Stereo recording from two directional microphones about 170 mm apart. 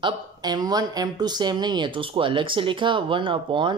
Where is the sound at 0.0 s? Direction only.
25° right (ahead or behind).